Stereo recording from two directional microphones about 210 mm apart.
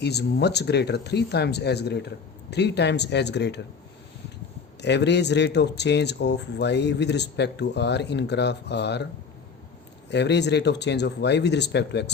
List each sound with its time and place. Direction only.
0.0 s speech: 50° left (ahead or behind)
4.8 s speech: 55° left (ahead or behind)
10.1 s speech: 55° left (ahead or behind)